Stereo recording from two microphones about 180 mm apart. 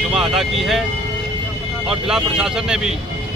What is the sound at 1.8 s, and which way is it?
Speech, 5° right (ahead or behind).